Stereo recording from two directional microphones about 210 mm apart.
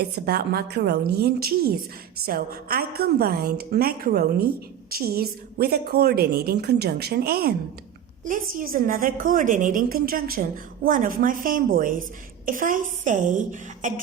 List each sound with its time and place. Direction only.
0.3 s a woman's voice: 50° right (ahead or behind)